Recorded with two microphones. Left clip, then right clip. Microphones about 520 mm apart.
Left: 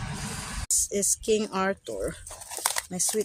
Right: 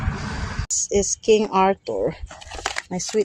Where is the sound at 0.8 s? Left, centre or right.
Left.